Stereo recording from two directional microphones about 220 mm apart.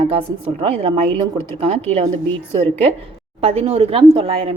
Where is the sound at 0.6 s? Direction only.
25° right (ahead or behind).